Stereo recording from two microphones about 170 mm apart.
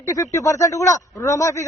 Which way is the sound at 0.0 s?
20° left (ahead or behind).